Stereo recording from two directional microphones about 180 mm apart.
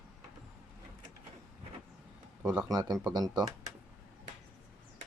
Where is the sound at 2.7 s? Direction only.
20° right (ahead or behind).